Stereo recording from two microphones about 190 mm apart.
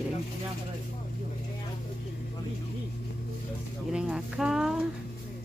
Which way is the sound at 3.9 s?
5° right (ahead or behind).